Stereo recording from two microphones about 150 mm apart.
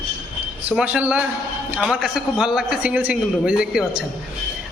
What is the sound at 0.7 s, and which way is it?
A man's voice, 10° right (ahead or behind).